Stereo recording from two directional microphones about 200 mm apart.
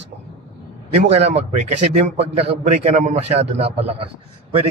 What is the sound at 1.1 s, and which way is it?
A man's voice, 30° right (ahead or behind).